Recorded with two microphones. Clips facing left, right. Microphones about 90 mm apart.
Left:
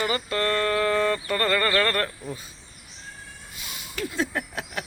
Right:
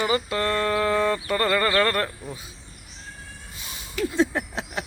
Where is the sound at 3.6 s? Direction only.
30° right (ahead or behind).